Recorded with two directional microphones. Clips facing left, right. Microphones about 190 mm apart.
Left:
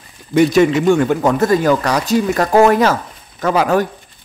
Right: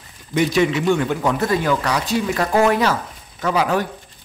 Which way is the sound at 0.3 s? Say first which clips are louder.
Left 6 dB; 45° left (ahead or behind).